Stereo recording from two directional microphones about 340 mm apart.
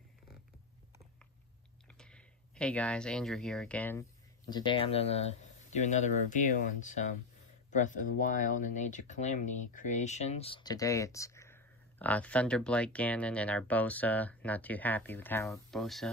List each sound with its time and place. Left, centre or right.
1.9 s speech: centre